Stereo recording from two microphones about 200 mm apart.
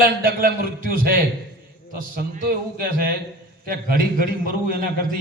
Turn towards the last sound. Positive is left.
turn(degrees=-45)  # may be behind; listen again after turning